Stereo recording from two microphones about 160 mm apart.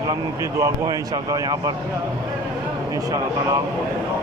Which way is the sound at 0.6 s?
25° right (ahead or behind).